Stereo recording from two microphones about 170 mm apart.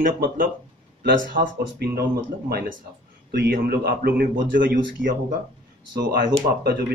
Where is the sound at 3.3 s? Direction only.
65° right (ahead or behind).